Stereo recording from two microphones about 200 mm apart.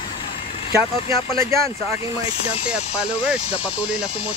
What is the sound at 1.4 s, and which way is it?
Speech, 15° right (ahead or behind).